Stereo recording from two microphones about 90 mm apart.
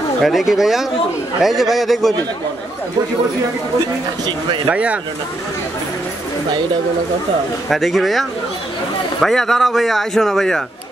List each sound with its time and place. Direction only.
0.2 s speech: centre (ahead or behind)
4.6 s speech: 15° right (ahead or behind)
7.7 s speech: centre (ahead or behind)